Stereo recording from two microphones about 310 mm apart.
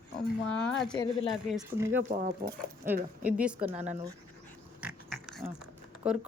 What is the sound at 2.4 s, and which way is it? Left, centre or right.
Speech, centre.